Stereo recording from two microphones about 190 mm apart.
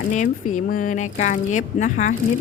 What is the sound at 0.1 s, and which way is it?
Speech, 40° left (ahead or behind).